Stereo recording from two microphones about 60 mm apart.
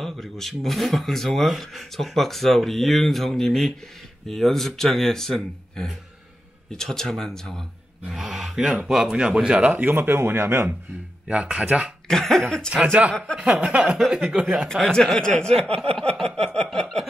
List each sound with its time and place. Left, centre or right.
0.0 s speech: centre
8.1 s speech: centre; by 9.8 s right
9.8 s speech: right
11.2 s speech: centre
12.1 s speech: centre
12.8 s speech: right
13.8 s speech: centre
14.7 s speech: centre